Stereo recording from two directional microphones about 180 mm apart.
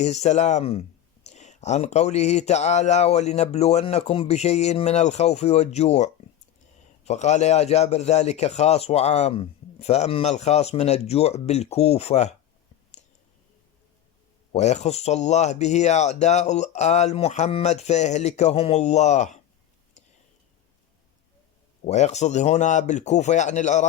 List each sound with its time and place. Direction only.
0.0 s speech: 40° left (ahead or behind)
14.5 s speech: 40° left (ahead or behind)
21.8 s speech: 40° left (ahead or behind)